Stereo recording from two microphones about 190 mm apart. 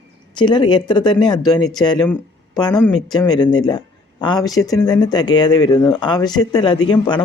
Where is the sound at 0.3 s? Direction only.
25° left (ahead or behind).